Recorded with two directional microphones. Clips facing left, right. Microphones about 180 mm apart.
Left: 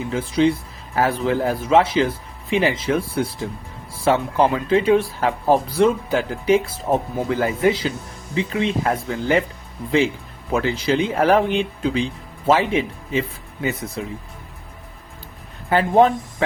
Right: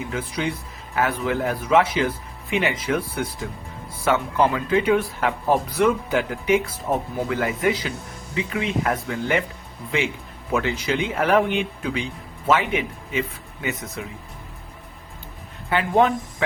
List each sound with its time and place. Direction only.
0.1 s speech: 25° left (ahead or behind)
10.5 s speech: 35° left (ahead or behind)
15.7 s speech: 35° left (ahead or behind)